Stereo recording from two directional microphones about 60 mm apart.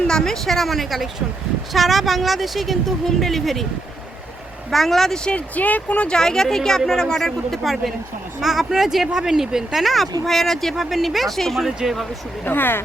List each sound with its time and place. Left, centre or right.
0.1 s speech: centre
4.7 s speech: centre
5.5 s speech: left
6.1 s speech: centre
12.5 s speech: left